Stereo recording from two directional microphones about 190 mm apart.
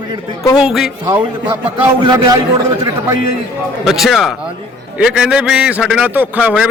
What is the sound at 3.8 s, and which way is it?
A man's voice, centre (ahead or behind).